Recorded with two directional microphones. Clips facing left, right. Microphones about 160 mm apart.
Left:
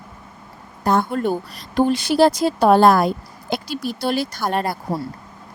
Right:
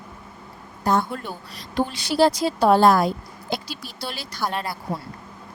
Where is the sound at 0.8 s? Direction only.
55° left (ahead or behind).